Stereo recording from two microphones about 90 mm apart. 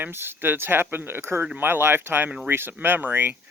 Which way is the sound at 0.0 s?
25° right (ahead or behind).